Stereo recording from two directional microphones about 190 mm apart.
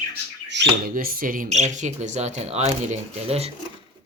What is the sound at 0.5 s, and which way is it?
Speech, 50° right (ahead or behind).